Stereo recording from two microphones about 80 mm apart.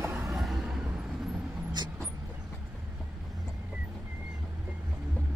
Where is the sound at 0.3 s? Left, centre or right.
Centre.